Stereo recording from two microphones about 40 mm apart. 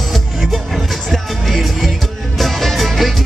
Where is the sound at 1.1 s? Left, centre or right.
Centre.